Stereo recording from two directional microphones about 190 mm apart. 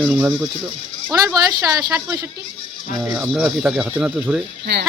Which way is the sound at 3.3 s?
Centre (ahead or behind).